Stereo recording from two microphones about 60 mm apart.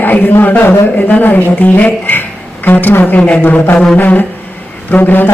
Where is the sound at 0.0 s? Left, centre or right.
Left.